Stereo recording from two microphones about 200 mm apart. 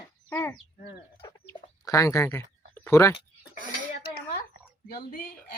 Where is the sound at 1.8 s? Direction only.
15° left (ahead or behind).